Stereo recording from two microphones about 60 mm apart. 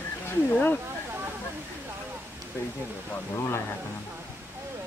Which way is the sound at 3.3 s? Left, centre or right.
Left.